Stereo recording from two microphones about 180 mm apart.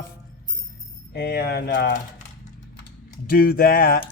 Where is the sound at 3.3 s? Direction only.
55° left (ahead or behind).